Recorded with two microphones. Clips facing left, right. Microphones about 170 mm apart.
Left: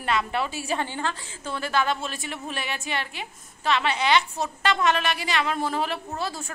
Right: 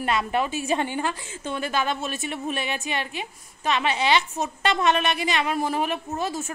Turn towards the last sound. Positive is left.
turn(degrees=-15)  # may be behind; listen again after turning